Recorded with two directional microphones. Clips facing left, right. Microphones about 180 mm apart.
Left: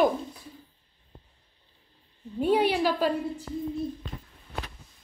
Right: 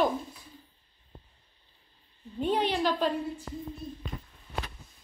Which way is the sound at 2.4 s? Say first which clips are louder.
Left 4 dB; 10° left (ahead or behind).